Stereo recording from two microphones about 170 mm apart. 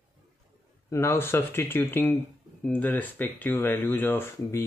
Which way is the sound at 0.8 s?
15° left (ahead or behind).